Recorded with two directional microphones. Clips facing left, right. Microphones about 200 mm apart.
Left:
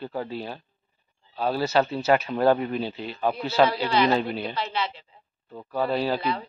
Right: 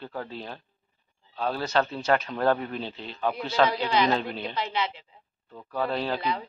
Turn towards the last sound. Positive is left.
turn(degrees=5)  # may be behind; listen again after turning